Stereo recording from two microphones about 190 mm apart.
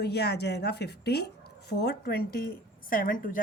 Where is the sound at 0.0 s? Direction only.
60° left (ahead or behind).